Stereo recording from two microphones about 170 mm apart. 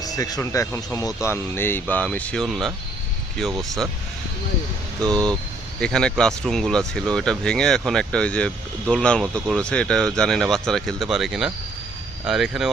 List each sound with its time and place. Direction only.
0.0 s speech: 20° left (ahead or behind); by 3.8 s centre (ahead or behind)
4.9 s speech: 5° left (ahead or behind)